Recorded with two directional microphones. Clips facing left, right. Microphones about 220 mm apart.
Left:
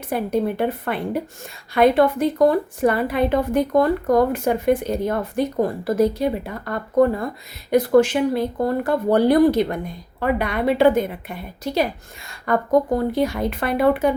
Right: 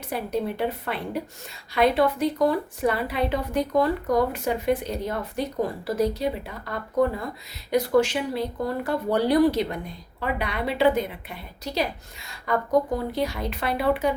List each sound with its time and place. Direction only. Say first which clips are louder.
0.1 s speech: left 6 dB; 50° left (ahead or behind)